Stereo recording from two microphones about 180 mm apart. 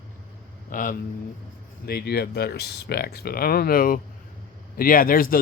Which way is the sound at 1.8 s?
60° left (ahead or behind).